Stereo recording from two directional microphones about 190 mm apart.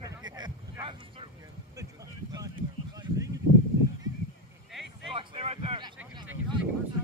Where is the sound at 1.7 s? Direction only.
20° right (ahead or behind).